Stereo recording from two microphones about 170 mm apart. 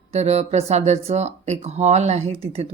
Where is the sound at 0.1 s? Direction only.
40° right (ahead or behind).